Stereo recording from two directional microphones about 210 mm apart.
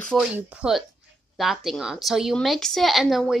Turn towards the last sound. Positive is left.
turn(degrees=0)  # may be behind; listen again after turning